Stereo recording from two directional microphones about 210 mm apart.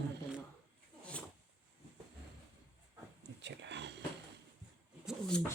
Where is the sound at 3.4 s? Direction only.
55° right (ahead or behind).